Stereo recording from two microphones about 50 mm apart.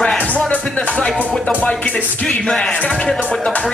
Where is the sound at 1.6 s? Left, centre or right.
Left.